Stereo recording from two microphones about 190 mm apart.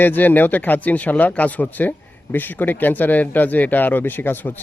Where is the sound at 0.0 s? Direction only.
10° left (ahead or behind).